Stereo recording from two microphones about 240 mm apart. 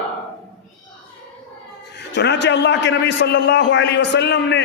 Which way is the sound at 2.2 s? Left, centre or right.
Left.